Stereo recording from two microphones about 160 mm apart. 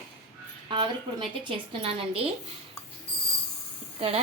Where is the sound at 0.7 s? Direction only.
30° right (ahead or behind).